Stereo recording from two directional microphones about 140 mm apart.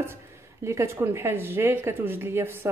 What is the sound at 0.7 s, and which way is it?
Speech, 20° right (ahead or behind).